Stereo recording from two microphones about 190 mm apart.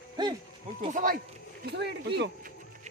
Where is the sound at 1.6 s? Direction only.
60° right (ahead or behind).